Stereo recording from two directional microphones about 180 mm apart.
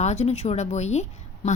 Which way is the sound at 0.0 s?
40° left (ahead or behind).